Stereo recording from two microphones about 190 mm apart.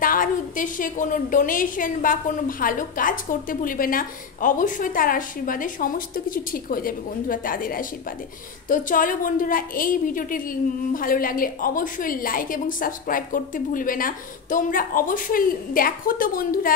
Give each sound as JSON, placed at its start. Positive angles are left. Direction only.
{"t": 0.0, "sound": "a woman's voice", "side_deg": 45}